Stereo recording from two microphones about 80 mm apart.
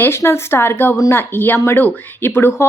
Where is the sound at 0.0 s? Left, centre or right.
Left.